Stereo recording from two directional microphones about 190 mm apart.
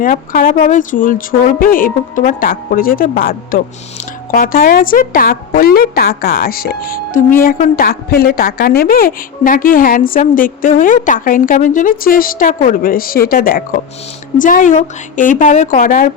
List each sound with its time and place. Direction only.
0.0 s a woman's voice: 45° left (ahead or behind)